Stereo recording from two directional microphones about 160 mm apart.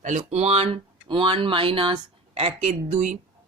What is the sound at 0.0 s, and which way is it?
A man's voice, 45° right (ahead or behind).